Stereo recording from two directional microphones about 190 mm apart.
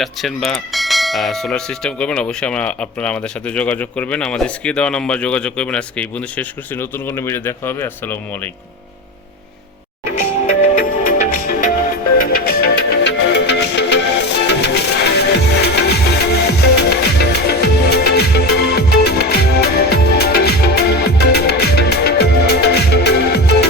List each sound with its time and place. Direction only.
0.0 s speech: centre (ahead or behind)
11.2 s music: 45° left (ahead or behind)